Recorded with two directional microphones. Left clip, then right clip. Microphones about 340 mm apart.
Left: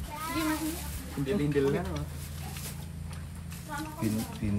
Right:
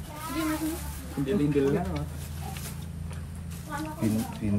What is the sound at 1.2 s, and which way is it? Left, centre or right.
Speech, centre.